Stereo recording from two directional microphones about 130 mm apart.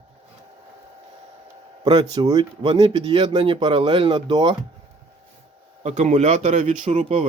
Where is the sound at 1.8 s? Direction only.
35° right (ahead or behind).